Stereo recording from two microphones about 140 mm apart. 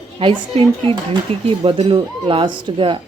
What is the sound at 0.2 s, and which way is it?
A woman's voice, 40° right (ahead or behind).